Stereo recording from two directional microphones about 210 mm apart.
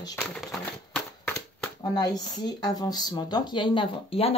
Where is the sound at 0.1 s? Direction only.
5° left (ahead or behind).